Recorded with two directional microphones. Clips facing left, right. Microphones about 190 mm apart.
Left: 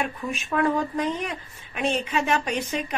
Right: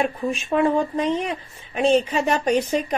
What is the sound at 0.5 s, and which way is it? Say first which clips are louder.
A woman's voice: right 4 dB; 30° right (ahead or behind).